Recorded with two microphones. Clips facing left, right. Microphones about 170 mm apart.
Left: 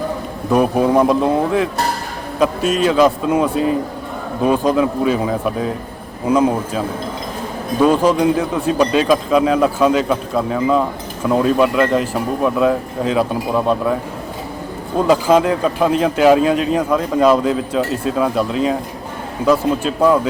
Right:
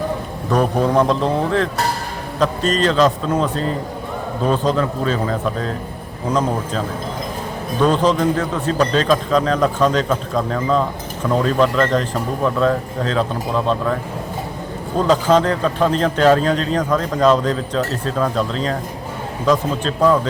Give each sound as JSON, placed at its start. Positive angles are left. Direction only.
{"t": 0.5, "sound": "speech", "side_deg": 10}